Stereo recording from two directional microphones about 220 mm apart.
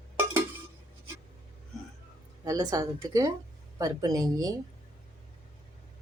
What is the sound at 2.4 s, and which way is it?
A woman's voice, 15° right (ahead or behind).